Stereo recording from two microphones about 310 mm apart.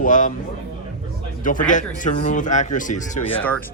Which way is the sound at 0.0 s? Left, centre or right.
Left.